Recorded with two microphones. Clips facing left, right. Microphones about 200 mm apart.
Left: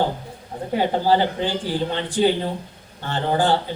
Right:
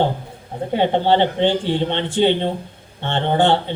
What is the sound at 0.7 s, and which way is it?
Speech, 25° right (ahead or behind).